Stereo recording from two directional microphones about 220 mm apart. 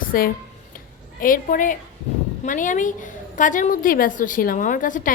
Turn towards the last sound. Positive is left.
turn(degrees=35)  # may be behind; listen again after turning